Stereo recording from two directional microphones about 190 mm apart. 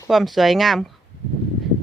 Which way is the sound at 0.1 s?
Centre (ahead or behind).